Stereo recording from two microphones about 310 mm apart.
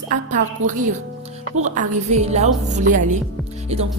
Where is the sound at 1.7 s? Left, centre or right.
Right.